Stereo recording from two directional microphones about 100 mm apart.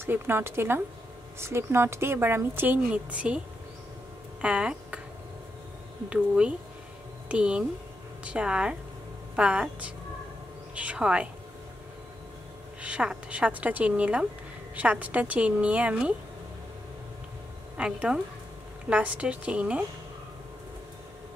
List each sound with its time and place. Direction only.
0.0 s a woman's voice: 25° right (ahead or behind)
4.4 s speech: 10° right (ahead or behind)
6.0 s a woman's voice: 10° right (ahead or behind)
12.8 s a woman's voice: 10° right (ahead or behind)
17.7 s a woman's voice: 10° right (ahead or behind)